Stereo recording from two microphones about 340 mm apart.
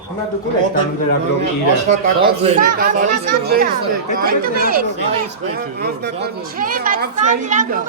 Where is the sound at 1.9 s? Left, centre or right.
Centre.